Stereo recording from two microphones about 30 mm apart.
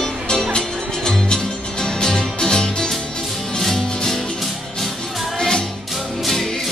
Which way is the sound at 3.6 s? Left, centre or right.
Centre.